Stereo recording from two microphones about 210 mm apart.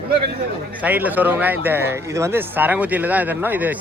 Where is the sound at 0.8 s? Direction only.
5° right (ahead or behind).